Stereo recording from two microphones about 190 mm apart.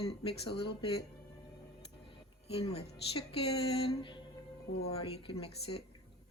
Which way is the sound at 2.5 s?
30° left (ahead or behind).